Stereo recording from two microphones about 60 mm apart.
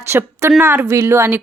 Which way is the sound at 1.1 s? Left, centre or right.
Right.